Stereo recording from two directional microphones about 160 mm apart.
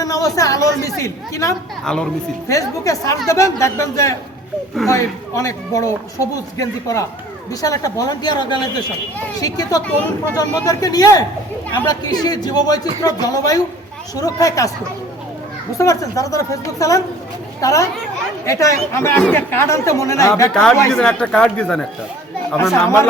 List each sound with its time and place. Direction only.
0.0 s speech: 20° left (ahead or behind)
1.8 s speech: 5° left (ahead or behind)
2.5 s speech: 20° left (ahead or behind)
15.8 s speech: 20° left (ahead or behind)
20.5 s speech: 5° left (ahead or behind)
22.5 s speech: 15° left (ahead or behind)